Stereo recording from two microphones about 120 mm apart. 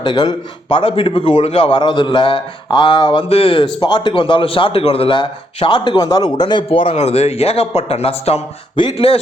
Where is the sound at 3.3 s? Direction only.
50° left (ahead or behind).